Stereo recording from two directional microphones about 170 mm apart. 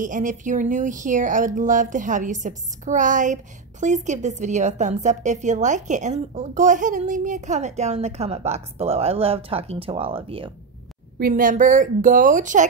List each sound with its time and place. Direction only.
0.0 s a woman's voice: 50° right (ahead or behind); by 10.5 s 30° right (ahead or behind)
11.1 s a woman's voice: 55° right (ahead or behind)